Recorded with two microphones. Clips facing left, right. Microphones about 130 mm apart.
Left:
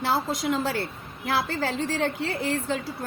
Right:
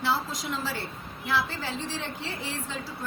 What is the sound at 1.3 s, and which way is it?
A woman's voice, 50° left (ahead or behind).